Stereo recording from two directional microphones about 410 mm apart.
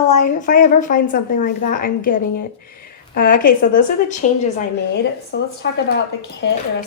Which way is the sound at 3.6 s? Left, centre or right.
Centre.